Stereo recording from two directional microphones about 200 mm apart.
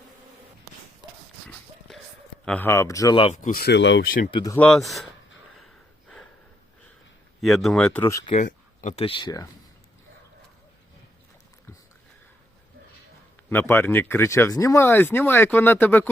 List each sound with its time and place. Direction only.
2.4 s speech: 5° left (ahead or behind); by 3.3 s 25° left (ahead or behind)
3.3 s speech: 45° left (ahead or behind); by 4.1 s 65° left (ahead or behind)
4.3 s speech: 25° left (ahead or behind)
4.5 s speech: 5° left (ahead or behind)
7.4 s speech: centre (ahead or behind)
8.3 s speech: 40° left (ahead or behind); by 9.5 s 20° left (ahead or behind)
13.5 s speech: 10° left (ahead or behind)